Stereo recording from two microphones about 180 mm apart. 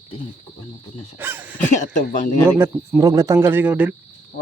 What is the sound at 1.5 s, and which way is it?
Speech, 45° left (ahead or behind).